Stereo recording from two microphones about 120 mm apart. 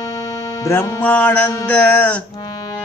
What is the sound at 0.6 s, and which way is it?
Music, 25° left (ahead or behind).